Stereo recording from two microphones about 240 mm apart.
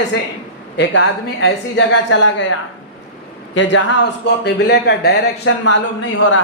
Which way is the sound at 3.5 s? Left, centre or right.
Left.